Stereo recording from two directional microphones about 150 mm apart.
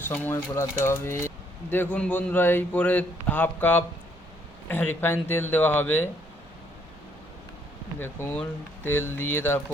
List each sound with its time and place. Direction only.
0.1 s a man's voice: 15° left (ahead or behind)
7.9 s a man's voice: 15° left (ahead or behind)